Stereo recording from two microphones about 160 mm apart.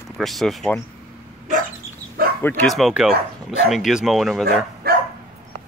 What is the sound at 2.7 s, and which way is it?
Speech, centre (ahead or behind).